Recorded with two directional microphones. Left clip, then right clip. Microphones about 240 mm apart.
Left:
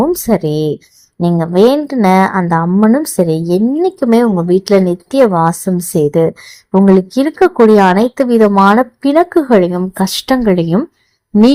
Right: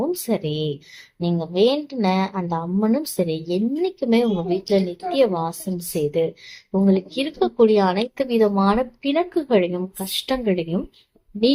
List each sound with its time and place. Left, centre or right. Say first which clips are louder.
0.0 s a woman's voice: left 11 dB; left